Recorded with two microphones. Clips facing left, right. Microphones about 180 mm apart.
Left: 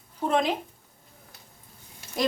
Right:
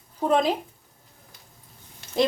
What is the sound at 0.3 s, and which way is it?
Speech, 35° right (ahead or behind).